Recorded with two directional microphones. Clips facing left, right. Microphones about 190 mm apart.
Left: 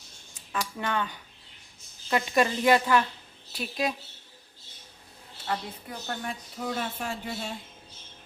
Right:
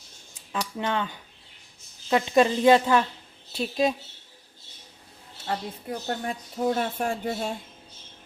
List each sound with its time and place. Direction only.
0.5 s a woman's voice: 20° right (ahead or behind)
6.1 s speech: 40° right (ahead or behind)